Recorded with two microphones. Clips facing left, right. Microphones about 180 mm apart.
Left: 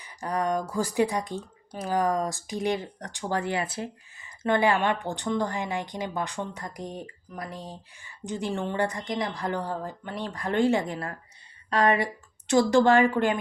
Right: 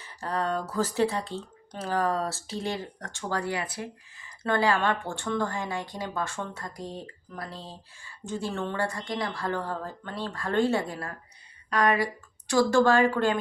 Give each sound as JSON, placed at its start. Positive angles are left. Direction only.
{"t": 0.0, "sound": "speech", "side_deg": 15}